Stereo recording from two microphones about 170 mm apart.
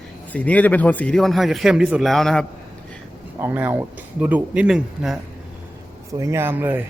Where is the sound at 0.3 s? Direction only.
10° left (ahead or behind).